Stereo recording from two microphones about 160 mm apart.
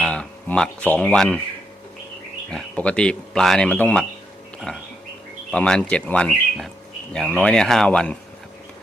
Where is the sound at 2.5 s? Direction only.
5° left (ahead or behind).